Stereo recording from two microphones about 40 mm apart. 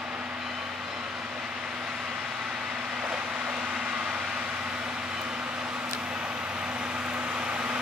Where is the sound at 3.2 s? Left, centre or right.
Right.